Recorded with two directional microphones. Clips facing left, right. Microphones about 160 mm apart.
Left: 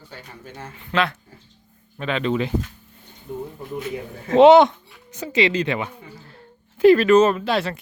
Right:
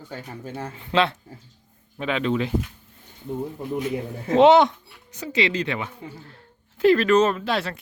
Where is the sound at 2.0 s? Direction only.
10° right (ahead or behind).